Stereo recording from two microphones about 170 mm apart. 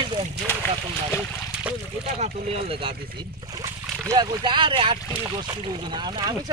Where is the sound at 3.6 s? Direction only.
20° right (ahead or behind).